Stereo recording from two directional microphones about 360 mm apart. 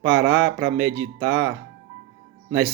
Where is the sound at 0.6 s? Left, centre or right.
Right.